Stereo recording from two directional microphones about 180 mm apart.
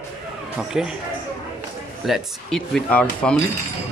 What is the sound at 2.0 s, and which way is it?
Speech, centre (ahead or behind).